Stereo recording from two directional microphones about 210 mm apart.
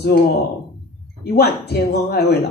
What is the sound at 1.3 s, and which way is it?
Speech, 50° left (ahead or behind).